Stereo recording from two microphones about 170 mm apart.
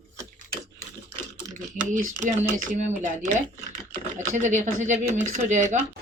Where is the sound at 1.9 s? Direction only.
45° right (ahead or behind).